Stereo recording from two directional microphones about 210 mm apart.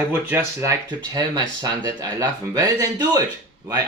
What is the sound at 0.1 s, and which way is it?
Speech, 10° right (ahead or behind).